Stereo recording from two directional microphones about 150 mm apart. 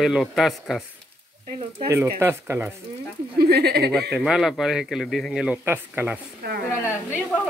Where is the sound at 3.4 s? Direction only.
90° right.